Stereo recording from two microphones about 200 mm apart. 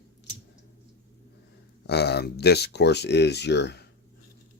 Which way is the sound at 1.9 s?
55° left (ahead or behind).